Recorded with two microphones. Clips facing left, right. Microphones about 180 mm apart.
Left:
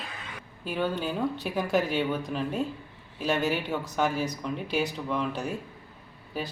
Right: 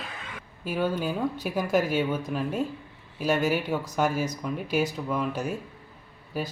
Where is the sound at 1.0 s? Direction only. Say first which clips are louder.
Right 1 dB; 5° right (ahead or behind).